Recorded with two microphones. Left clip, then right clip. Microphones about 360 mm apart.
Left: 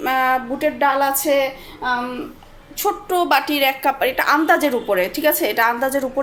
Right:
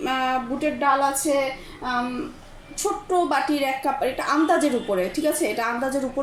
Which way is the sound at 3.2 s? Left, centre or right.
Left.